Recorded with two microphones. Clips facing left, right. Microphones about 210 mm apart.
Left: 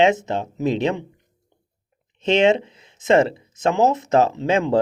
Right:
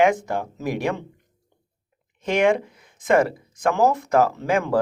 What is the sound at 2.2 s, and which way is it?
Speech, 25° left (ahead or behind).